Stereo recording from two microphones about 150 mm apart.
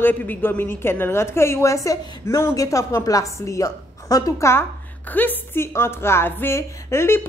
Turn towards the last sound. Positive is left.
turn(degrees=15)  # may be behind; listen again after turning